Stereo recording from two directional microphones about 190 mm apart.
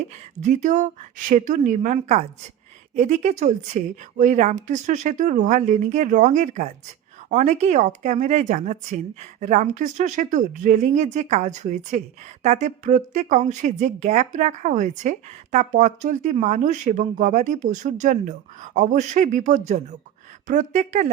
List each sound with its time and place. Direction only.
0.4 s speech: 40° right (ahead or behind)